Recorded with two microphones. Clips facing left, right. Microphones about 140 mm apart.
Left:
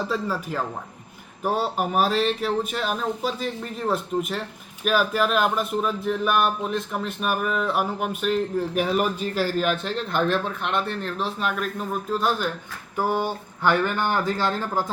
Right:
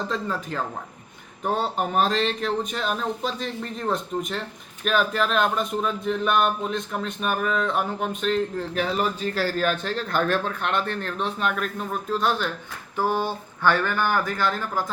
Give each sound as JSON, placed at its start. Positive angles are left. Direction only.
{"t": 0.1, "sound": "speech", "side_deg": 5}
{"t": 13.1, "sound": "speech", "side_deg": 15}